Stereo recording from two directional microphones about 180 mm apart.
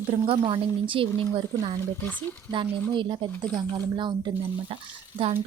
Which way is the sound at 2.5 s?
25° right (ahead or behind).